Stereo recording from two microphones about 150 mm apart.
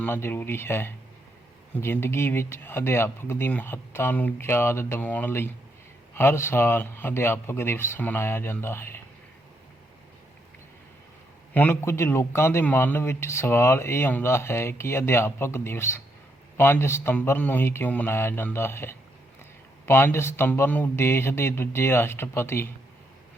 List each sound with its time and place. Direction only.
0.0 s a man's voice: 15° left (ahead or behind)
11.5 s a man's voice: 15° left (ahead or behind)